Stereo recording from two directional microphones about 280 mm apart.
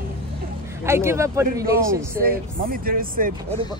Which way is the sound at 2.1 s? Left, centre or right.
Right.